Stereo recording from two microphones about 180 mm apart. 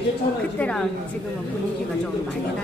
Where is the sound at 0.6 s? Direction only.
5° left (ahead or behind).